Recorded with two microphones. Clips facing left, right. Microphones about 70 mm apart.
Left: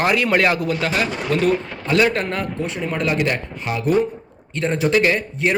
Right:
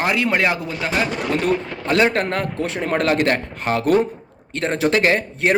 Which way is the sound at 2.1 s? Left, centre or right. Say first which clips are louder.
Right 2 dB; right.